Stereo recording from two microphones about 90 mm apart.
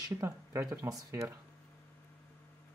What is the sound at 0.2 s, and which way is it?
Speech, 30° right (ahead or behind).